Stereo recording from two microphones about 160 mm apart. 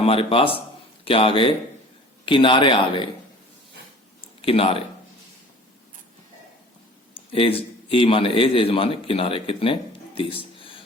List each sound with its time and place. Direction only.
0.0 s a man's voice: 35° left (ahead or behind)
4.4 s speech: 35° left (ahead or behind)
7.3 s a man's voice: 35° left (ahead or behind)